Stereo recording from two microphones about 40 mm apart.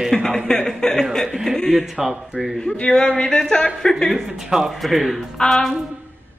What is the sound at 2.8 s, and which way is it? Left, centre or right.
Speech, left.